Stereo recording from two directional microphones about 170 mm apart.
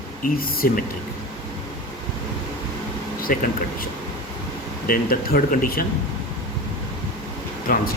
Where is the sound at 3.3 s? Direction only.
55° left (ahead or behind).